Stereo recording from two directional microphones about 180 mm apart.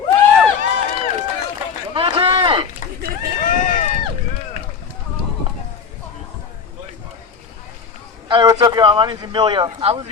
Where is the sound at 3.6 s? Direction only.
45° left (ahead or behind).